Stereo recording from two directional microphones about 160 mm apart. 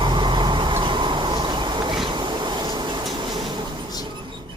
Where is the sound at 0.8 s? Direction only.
30° right (ahead or behind).